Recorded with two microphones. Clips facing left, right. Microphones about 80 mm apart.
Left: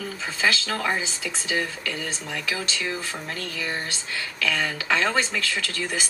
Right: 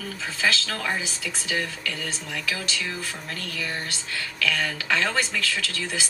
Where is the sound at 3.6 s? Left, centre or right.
Centre.